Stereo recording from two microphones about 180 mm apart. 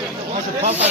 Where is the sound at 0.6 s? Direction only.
35° right (ahead or behind).